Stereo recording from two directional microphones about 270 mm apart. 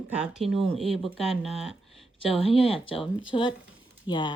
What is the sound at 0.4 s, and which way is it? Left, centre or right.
Speech, right.